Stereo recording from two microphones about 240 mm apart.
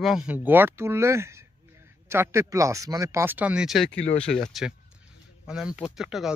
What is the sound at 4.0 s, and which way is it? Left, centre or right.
Speech, left.